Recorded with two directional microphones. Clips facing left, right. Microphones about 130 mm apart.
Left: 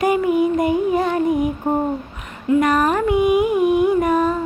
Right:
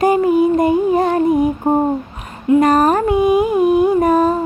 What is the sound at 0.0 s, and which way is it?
Music, 35° right (ahead or behind).